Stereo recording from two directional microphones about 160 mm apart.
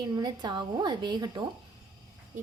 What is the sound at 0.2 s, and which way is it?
A woman's voice, 25° right (ahead or behind).